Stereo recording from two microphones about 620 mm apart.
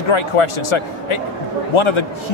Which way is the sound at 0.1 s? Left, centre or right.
Left.